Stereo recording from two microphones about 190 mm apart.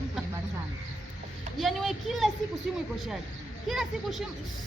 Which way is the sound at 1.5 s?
Centre (ahead or behind).